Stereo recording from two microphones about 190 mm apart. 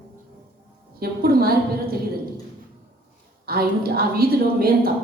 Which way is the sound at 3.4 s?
50° right (ahead or behind).